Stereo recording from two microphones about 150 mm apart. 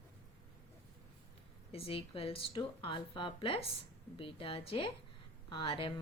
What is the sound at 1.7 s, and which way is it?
A woman's voice, 40° left (ahead or behind).